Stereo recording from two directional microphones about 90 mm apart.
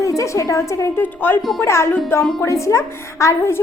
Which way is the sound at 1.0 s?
20° left (ahead or behind).